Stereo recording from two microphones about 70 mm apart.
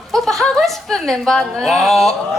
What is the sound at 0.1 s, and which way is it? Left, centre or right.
A woman's voice, centre.